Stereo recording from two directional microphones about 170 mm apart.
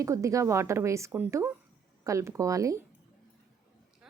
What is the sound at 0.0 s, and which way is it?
A woman's voice, 20° right (ahead or behind).